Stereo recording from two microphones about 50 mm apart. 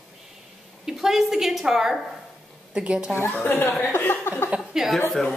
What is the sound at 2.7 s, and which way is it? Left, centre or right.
Speech, right.